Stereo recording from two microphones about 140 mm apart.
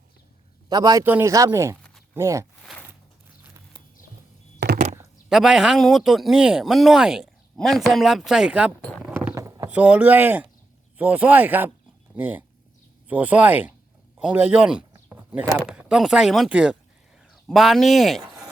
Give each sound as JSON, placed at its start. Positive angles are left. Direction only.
{"t": 0.7, "sound": "a man's voice", "side_deg": -25}
{"t": 1.0, "sound": "speech", "side_deg": -15}
{"t": 5.3, "sound": "a man's voice", "side_deg": -5}
{"t": 8.8, "sound": "mechanisms", "side_deg": 5}
{"t": 9.1, "sound": "mechanisms", "side_deg": -20}
{"t": 9.6, "sound": "speech", "side_deg": -10}
{"t": 14.9, "sound": "a sound", "side_deg": -10}
{"t": 15.5, "sound": "a man's voice", "side_deg": -5}
{"t": 18.2, "sound": "a sound", "side_deg": -25}